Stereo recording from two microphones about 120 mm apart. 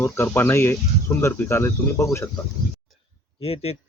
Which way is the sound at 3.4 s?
50° left (ahead or behind).